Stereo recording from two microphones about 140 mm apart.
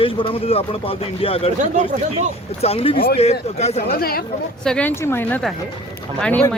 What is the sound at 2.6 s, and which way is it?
Speech, 45° left (ahead or behind).